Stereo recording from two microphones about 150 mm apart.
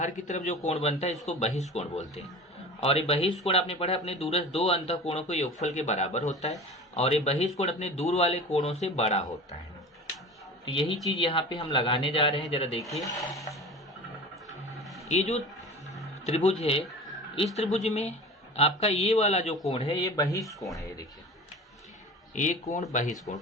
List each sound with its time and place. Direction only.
0.0 s speech: 55° left (ahead or behind)
10.7 s a man's voice: 35° left (ahead or behind)
12.9 s speech: 20° left (ahead or behind)
15.1 s a man's voice: 50° left (ahead or behind)
20.0 s speech: 25° left (ahead or behind)
22.7 s speech: 50° left (ahead or behind)
23.1 s speech: 25° left (ahead or behind)